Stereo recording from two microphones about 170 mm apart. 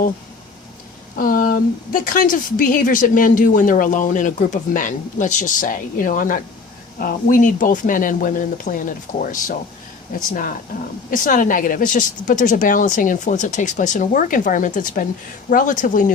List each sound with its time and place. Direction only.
1.1 s speech: 55° left (ahead or behind)